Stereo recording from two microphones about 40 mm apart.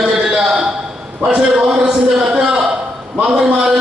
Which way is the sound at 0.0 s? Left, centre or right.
Centre.